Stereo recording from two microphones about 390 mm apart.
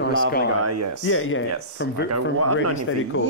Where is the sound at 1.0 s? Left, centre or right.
Left.